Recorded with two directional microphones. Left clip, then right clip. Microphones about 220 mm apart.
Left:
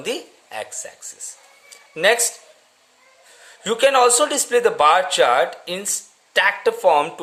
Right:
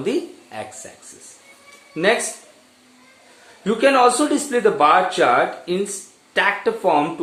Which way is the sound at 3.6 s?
50° left (ahead or behind).